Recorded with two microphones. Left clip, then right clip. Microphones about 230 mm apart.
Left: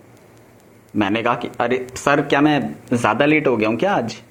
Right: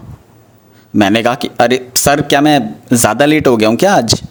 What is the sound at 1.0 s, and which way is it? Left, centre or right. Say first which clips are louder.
Speech: right 8 dB; right.